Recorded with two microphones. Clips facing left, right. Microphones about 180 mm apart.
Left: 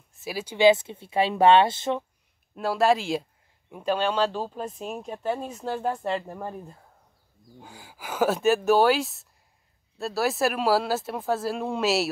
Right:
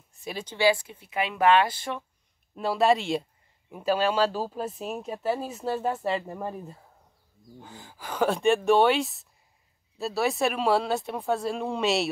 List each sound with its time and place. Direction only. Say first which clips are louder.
0.1 s speech: left 2 dB; 5° left (ahead or behind)
0.6 s speech: left 5 dB; 20° left (ahead or behind)
2.5 s speech: left 1 dB; centre (ahead or behind)
7.6 s speech: left 1 dB; 10° left (ahead or behind)